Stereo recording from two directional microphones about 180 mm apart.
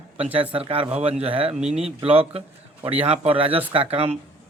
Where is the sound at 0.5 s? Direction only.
30° right (ahead or behind).